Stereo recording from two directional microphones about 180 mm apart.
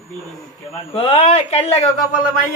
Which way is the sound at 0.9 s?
30° left (ahead or behind).